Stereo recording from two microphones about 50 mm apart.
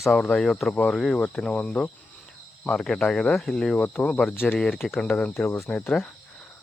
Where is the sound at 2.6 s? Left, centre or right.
Centre.